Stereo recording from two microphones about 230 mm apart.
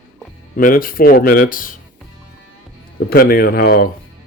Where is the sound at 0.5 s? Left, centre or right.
Left.